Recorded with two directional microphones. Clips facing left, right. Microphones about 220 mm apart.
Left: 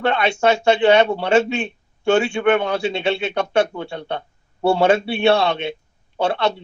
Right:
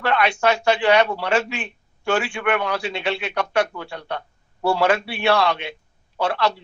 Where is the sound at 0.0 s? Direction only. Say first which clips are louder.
Left 2 dB; 25° left (ahead or behind).